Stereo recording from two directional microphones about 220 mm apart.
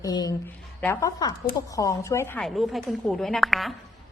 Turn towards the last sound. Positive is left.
turn(degrees=0)  # may be behind; listen again after turning